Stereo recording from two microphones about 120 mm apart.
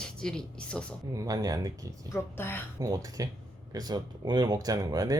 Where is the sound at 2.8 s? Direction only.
30° right (ahead or behind).